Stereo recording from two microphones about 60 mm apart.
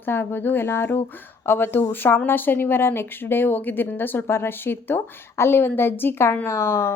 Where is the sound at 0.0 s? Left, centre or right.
Left.